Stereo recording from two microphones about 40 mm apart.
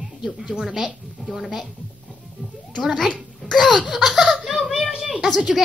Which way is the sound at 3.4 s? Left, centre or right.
Centre.